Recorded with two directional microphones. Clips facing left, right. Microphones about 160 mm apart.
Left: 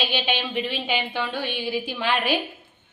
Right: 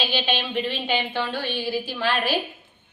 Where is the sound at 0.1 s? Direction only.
15° left (ahead or behind).